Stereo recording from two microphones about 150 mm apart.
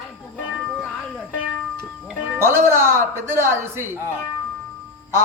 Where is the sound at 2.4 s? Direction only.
15° right (ahead or behind).